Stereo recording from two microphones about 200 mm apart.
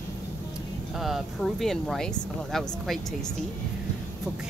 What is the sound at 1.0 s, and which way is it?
Speech, centre (ahead or behind).